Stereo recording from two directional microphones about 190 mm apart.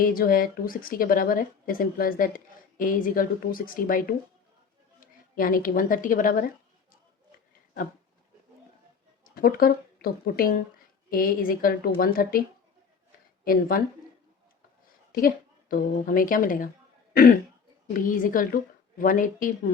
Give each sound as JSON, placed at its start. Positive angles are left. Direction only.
{"t": 0.0, "sound": "a woman's voice", "side_deg": 50}
{"t": 9.3, "sound": "speech", "side_deg": 50}
{"t": 13.4, "sound": "speech", "side_deg": 50}
{"t": 15.7, "sound": "speech", "side_deg": 45}
{"t": 17.9, "sound": "speech", "side_deg": 45}